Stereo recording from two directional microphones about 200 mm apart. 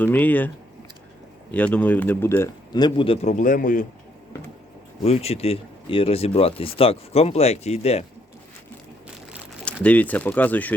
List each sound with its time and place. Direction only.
0.0 s speech: 10° left (ahead or behind); by 3.8 s 40° left (ahead or behind)
5.0 s speech: 30° left (ahead or behind)
9.8 s speech: 10° left (ahead or behind)